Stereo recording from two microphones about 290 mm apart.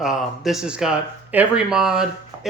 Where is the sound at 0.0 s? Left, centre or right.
Centre.